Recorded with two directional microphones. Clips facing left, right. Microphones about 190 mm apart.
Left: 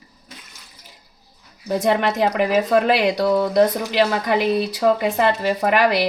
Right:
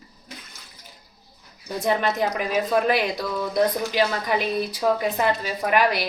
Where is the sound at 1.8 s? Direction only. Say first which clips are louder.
Left 3 dB; 75° left (ahead or behind).